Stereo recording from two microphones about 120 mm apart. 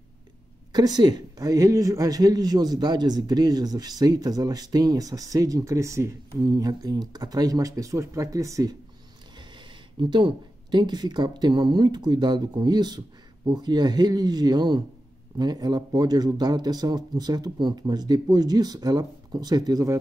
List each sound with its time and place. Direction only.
0.7 s speech: 35° right (ahead or behind)
9.9 s speech: 45° right (ahead or behind)